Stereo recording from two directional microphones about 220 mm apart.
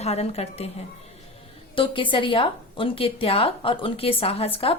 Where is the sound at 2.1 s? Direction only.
25° left (ahead or behind).